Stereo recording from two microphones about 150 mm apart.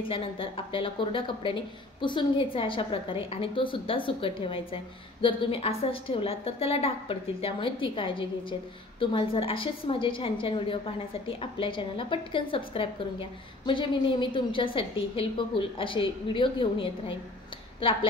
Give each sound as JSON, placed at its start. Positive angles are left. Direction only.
{"t": 0.1, "sound": "a woman's voice", "side_deg": 35}